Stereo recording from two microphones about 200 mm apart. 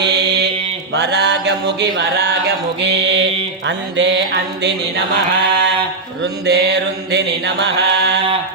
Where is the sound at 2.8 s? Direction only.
60° right (ahead or behind).